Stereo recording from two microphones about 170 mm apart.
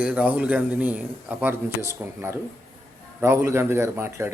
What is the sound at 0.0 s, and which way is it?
A man's voice, 10° right (ahead or behind).